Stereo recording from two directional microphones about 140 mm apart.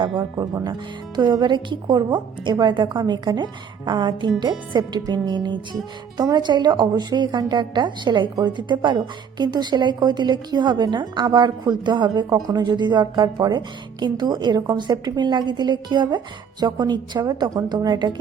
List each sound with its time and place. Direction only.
0.0 s a woman's voice: 35° right (ahead or behind)